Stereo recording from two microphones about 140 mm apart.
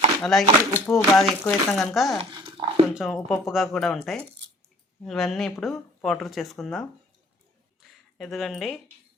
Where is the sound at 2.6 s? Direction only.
40° right (ahead or behind).